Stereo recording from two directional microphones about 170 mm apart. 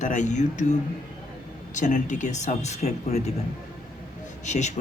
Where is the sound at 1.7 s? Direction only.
45° left (ahead or behind).